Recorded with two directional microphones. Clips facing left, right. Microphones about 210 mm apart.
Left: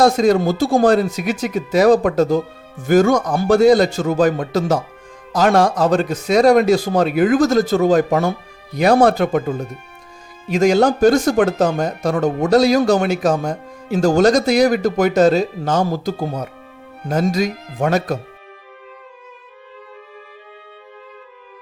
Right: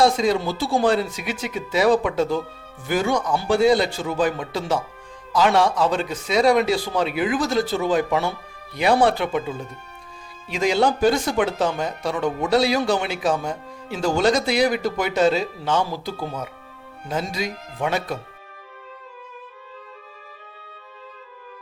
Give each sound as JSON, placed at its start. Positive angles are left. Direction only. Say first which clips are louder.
{"t": 0.0, "sound": "speech", "louder": "left 5 dB", "side_deg": 45}